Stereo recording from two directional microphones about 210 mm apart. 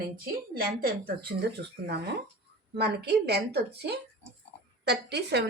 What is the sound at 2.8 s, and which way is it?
Speech, 50° right (ahead or behind).